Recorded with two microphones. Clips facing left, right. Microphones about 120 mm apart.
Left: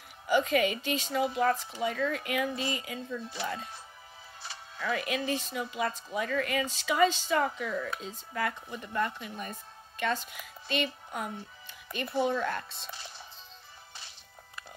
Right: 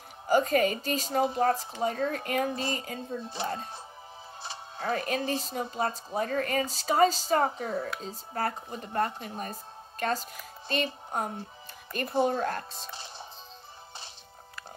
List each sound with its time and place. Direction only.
0.3 s speech: 40° right (ahead or behind)
4.4 s music: 25° right (ahead or behind)
4.8 s speech: 40° right (ahead or behind)